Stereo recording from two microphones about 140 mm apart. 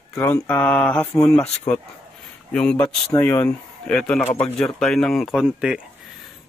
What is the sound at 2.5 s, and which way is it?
A man's voice, 5° left (ahead or behind).